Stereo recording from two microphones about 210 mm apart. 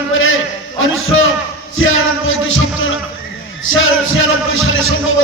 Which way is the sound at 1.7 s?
70° left (ahead or behind).